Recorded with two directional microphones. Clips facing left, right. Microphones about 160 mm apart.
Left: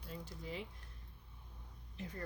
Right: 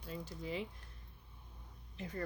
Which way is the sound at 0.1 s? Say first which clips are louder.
Right 4 dB; 90° right.